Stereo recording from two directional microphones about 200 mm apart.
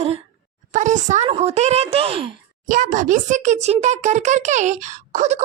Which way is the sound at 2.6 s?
40° right (ahead or behind).